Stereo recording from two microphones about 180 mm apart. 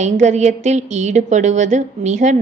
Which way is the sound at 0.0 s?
40° right (ahead or behind).